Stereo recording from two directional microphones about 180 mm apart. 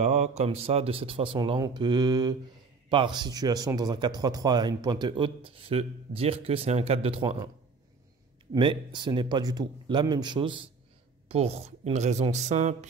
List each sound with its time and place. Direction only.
0.0 s a man's voice: 40° right (ahead or behind)
8.5 s a man's voice: 25° right (ahead or behind)